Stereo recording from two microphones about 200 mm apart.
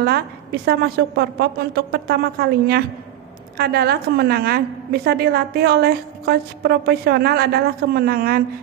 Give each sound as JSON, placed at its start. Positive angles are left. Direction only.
{"t": 0.0, "sound": "a woman's voice", "side_deg": -50}